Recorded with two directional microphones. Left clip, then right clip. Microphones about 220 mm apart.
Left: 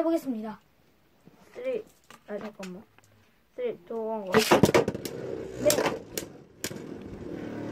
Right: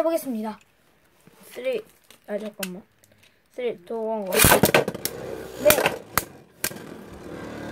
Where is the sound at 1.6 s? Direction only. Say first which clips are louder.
Right 5 dB; 35° right (ahead or behind).